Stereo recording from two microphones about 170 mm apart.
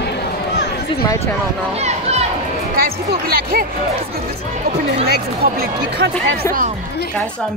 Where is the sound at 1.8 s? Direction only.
40° right (ahead or behind).